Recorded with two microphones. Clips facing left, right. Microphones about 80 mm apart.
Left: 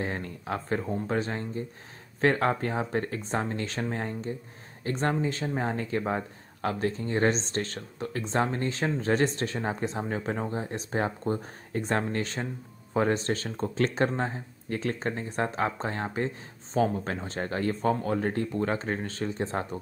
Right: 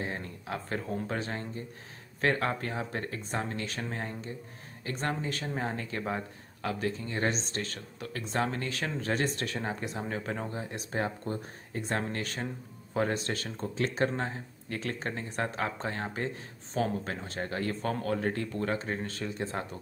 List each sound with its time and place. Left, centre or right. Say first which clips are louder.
0.5 s speech: left 4 dB; left